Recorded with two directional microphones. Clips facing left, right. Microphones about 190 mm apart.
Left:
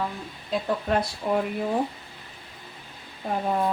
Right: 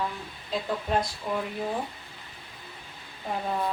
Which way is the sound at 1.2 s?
60° left (ahead or behind).